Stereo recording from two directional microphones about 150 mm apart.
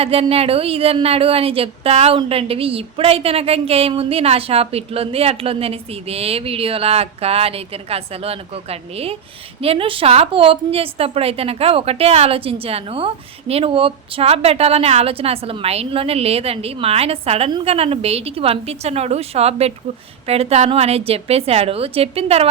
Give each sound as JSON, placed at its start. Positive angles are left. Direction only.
{"t": 0.0, "sound": "a woman's voice", "side_deg": -40}